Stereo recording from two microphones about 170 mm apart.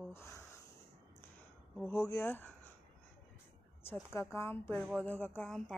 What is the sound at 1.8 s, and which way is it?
Speech, 20° left (ahead or behind).